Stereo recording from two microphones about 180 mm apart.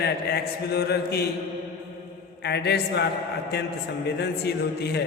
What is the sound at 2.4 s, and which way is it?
A man's voice, 65° left (ahead or behind).